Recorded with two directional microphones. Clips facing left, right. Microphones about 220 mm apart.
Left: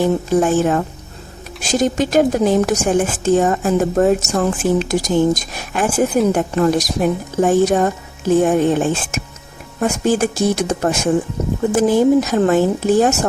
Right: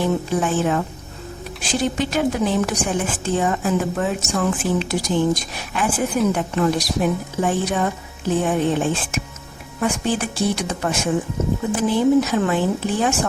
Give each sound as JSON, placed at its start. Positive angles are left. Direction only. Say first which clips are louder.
{"t": 0.0, "sound": "a woman's voice", "louder": "left 5 dB", "side_deg": 45}